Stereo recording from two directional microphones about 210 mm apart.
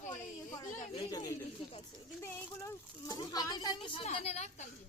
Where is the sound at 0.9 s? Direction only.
15° left (ahead or behind).